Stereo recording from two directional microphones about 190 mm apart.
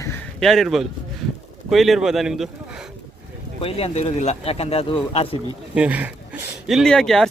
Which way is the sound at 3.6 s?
30° left (ahead or behind).